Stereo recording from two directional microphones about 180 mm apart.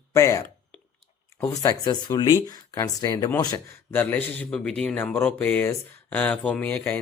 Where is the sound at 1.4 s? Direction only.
20° left (ahead or behind).